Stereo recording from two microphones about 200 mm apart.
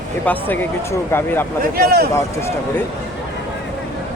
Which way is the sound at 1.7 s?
50° right (ahead or behind).